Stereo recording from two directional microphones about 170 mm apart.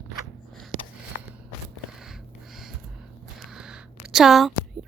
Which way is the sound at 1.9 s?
5° right (ahead or behind).